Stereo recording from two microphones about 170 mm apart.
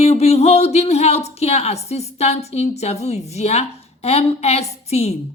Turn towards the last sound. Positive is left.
turn(degrees=40)  # may be behind; listen again after turning